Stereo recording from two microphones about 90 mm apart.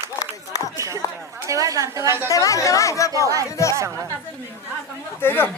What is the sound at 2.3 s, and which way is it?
Chatter, 40° left (ahead or behind).